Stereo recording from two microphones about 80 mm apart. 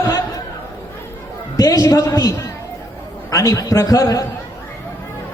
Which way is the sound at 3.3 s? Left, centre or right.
Left.